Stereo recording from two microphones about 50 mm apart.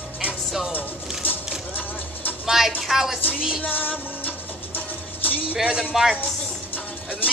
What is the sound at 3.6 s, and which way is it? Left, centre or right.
Music, left.